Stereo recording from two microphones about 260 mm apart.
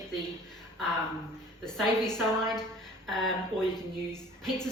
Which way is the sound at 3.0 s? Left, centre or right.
Centre.